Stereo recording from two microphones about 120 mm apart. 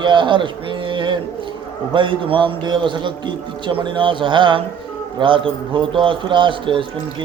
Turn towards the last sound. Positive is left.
turn(degrees=-45)  # may be behind; listen again after turning